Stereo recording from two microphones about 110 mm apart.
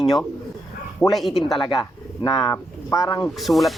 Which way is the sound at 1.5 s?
40° left (ahead or behind).